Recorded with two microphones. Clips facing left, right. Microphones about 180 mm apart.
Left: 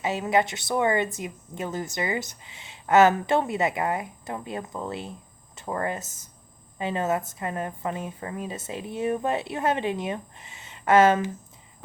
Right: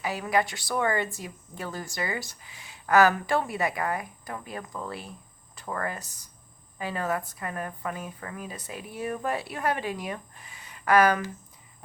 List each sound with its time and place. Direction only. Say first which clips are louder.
0.0 s a woman's voice: left 3 dB; 25° left (ahead or behind)